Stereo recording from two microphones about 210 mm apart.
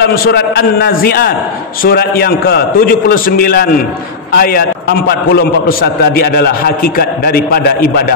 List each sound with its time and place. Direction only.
0.0 s a man's voice: 50° left (ahead or behind)